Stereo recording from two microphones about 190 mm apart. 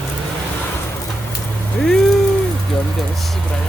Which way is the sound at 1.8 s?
5° left (ahead or behind).